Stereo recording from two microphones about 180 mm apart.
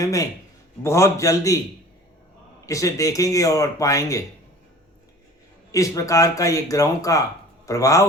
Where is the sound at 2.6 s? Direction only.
20° left (ahead or behind).